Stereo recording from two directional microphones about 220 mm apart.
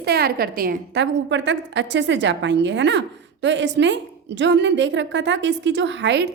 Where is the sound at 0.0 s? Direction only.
45° right (ahead or behind).